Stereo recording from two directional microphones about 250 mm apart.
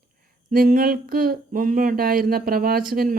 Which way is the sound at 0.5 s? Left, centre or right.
Right.